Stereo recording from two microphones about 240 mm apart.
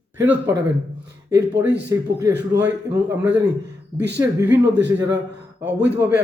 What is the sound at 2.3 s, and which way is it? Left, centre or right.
Speech, right.